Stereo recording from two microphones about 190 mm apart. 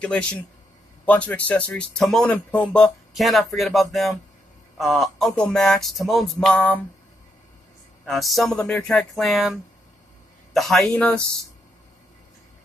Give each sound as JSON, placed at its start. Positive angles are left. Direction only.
{"t": 0.0, "sound": "speech", "side_deg": 5}
{"t": 8.0, "sound": "speech", "side_deg": 0}